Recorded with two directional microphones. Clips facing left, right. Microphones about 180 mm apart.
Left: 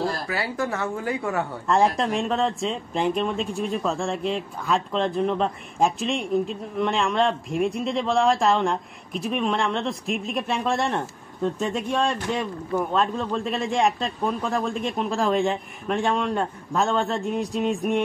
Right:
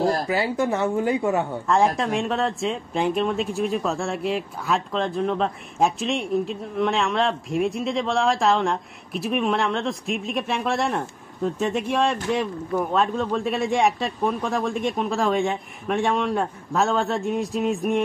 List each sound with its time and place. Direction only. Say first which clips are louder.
0.3 s a woman's voice: right 4 dB; 20° right (ahead or behind)
1.7 s speech: even; centre (ahead or behind)